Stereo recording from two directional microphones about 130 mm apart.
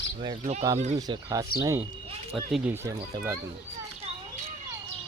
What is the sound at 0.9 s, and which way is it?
Speech, 30° right (ahead or behind).